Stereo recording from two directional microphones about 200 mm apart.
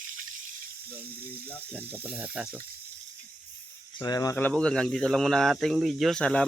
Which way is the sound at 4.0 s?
15° left (ahead or behind).